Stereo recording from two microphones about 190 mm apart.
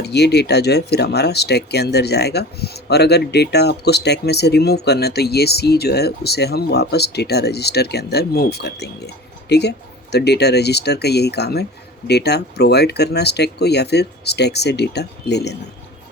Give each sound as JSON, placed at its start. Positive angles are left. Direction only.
{"t": 0.0, "sound": "speech", "side_deg": 60}